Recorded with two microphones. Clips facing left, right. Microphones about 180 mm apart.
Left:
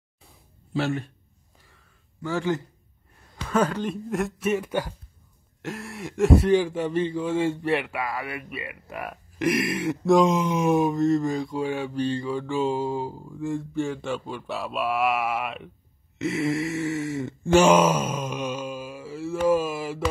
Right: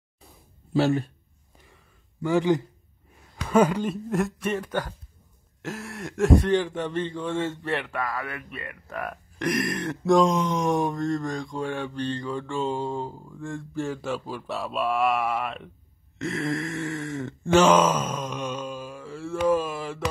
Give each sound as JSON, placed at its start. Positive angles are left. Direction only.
{"t": 0.7, "sound": "a man's voice", "side_deg": -35}
{"t": 2.2, "sound": "speech", "side_deg": -15}
{"t": 16.2, "sound": "a sound", "side_deg": 5}
{"t": 19.4, "sound": "mantra", "side_deg": 10}